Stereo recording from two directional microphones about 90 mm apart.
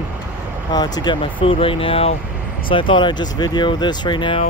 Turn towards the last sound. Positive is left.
turn(degrees=60)  # may be behind; listen again after turning